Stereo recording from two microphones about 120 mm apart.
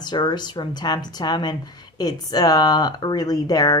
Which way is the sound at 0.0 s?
40° left (ahead or behind).